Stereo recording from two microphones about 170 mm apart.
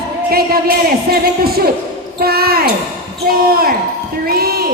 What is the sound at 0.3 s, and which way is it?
Speech, 60° right (ahead or behind).